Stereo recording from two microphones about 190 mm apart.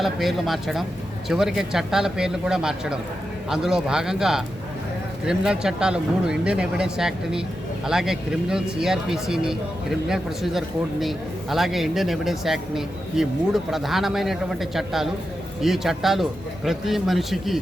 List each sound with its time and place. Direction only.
0.0 s speech: centre (ahead or behind)